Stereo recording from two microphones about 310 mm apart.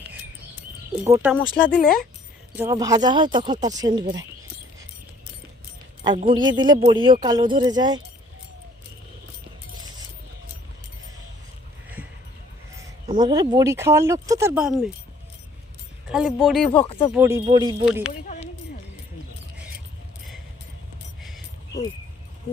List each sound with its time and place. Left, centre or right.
1.0 s speech: centre
1.8 s speech: left
2.5 s speech: centre
6.0 s speech: centre
13.1 s speech: centre
16.0 s speech: centre
16.7 s speech: centre
17.1 s speech: centre
21.2 s vehicle: centre